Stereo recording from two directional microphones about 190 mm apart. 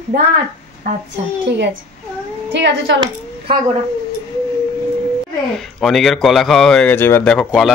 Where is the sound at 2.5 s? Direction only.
70° right (ahead or behind).